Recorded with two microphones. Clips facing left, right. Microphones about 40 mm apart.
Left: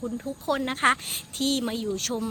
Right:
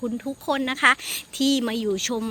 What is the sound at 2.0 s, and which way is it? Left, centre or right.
Speech, right.